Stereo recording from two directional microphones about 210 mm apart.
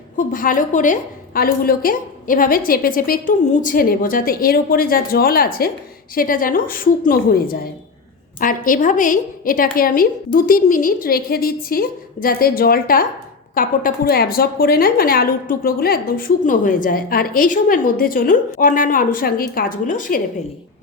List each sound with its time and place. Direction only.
0.3 s a woman's voice: 40° left (ahead or behind)